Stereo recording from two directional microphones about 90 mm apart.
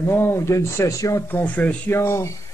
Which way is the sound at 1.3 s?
20° left (ahead or behind).